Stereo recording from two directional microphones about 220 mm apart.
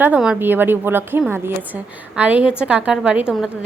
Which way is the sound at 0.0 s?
5° right (ahead or behind).